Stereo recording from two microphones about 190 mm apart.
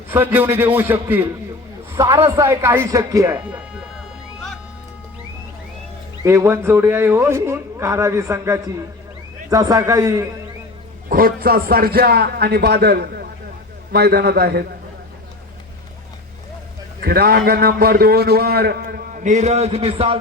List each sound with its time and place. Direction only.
0.1 s a man's voice: 10° right (ahead or behind)
3.3 s speech: 5° right (ahead or behind)
6.2 s a man's voice: 15° right (ahead or behind)
11.1 s a man's voice: 50° right (ahead or behind)
17.0 s a man's voice: 55° right (ahead or behind); by 20.1 s 30° right (ahead or behind)